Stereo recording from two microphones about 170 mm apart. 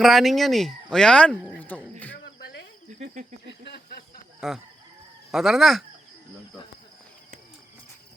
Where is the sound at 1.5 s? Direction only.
10° left (ahead or behind).